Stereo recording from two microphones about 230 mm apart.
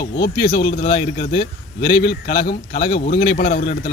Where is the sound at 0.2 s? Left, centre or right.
Left.